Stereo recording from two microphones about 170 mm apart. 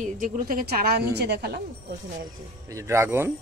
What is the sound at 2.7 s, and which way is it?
Speech, 15° right (ahead or behind).